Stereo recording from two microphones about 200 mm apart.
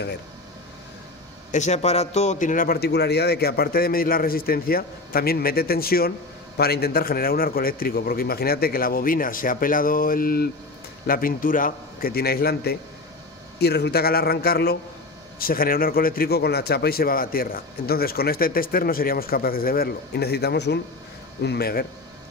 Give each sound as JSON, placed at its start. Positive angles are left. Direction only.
{"t": 1.5, "sound": "a man's voice", "side_deg": 35}